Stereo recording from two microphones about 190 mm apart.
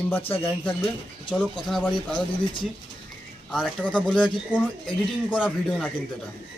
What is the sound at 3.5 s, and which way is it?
Speech, 5° left (ahead or behind).